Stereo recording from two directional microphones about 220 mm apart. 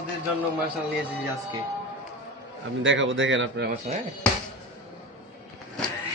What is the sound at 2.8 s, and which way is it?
A man's voice, 60° right (ahead or behind).